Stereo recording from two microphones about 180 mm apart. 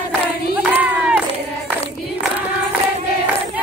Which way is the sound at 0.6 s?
5° right (ahead or behind).